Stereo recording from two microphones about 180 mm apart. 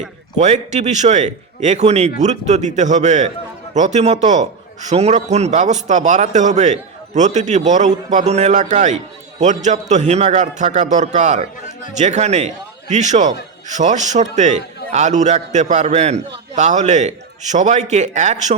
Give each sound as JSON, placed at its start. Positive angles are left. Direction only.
{"t": 0.3, "sound": "a man's voice", "side_deg": -35}